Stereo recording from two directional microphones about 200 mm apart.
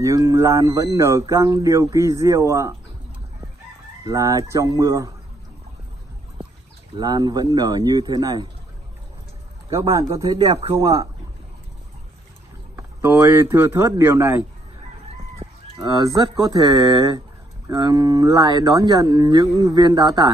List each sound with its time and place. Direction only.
0.0 s speech: 15° right (ahead or behind)
4.0 s speech: 15° right (ahead or behind)
7.0 s speech: 20° right (ahead or behind)
10.2 s speech: 20° right (ahead or behind)
12.7 s speech: 15° right (ahead or behind)
15.4 s chicken: 30° right (ahead or behind)
16.0 s speech: 20° right (ahead or behind)